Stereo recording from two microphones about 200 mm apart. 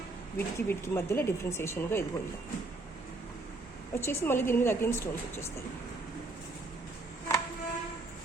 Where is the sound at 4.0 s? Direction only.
10° left (ahead or behind).